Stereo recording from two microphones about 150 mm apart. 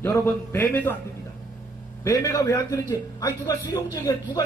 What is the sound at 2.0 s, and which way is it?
Speech, 20° left (ahead or behind).